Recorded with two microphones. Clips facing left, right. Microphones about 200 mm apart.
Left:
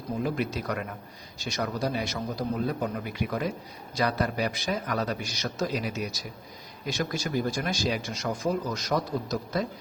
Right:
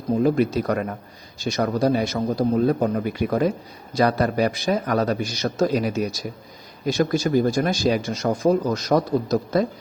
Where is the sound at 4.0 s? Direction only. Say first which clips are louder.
Right 8 dB; 55° right (ahead or behind); by 8.1 s 40° right (ahead or behind).